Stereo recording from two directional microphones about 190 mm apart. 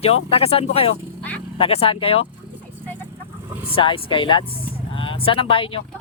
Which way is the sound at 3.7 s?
25° left (ahead or behind).